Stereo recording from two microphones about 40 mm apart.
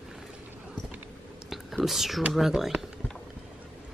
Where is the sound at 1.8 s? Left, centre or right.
Centre.